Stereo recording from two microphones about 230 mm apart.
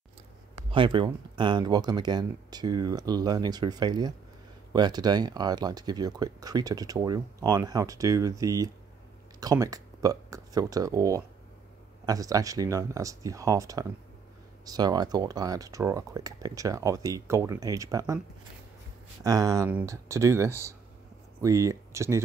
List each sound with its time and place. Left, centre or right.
0.7 s speech: right
19.2 s speech: centre